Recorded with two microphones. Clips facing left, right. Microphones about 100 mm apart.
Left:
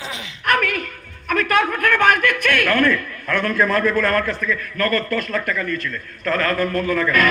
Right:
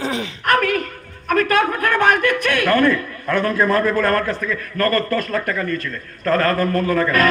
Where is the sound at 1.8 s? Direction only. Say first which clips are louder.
Even; 35° right (ahead or behind).